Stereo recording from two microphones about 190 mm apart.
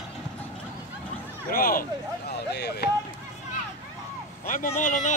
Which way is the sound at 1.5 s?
50° left (ahead or behind).